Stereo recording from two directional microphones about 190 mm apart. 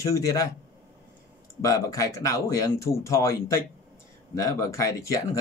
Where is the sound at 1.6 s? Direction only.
15° left (ahead or behind).